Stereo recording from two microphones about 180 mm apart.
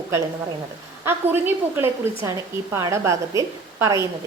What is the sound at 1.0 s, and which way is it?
A woman's voice, 10° right (ahead or behind).